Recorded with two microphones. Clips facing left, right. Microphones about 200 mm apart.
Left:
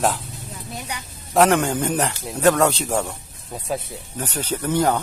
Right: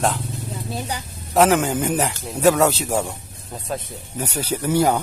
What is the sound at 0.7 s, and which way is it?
Speech, 30° right (ahead or behind).